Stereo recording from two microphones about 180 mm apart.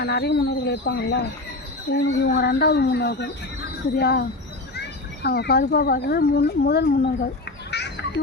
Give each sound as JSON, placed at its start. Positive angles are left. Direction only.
{"t": 0.0, "sound": "speech", "side_deg": 65}
{"t": 7.7, "sound": "music", "side_deg": 70}